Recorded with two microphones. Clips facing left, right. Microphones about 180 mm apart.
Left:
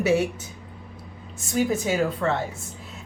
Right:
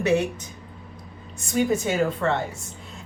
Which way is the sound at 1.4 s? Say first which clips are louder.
Right 1 dB; centre (ahead or behind).